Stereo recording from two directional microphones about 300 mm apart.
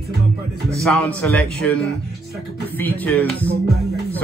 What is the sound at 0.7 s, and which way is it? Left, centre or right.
A man's voice, centre.